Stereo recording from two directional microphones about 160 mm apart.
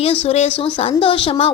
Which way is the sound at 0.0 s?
40° left (ahead or behind).